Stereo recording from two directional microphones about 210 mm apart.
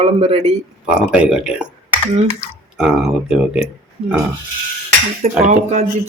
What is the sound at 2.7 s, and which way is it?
Speech, 5° right (ahead or behind).